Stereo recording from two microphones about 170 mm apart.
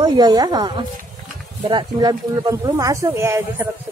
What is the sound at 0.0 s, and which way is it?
Speech, 25° right (ahead or behind).